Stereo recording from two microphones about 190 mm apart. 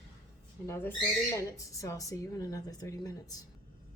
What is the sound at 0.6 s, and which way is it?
Speech, 10° left (ahead or behind).